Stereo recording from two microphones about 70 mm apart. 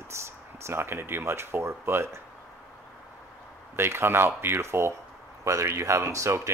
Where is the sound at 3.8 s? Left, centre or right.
Right.